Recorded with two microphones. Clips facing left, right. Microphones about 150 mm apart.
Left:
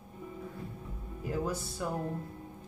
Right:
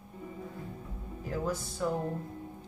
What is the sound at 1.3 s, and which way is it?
Speech, 10° left (ahead or behind).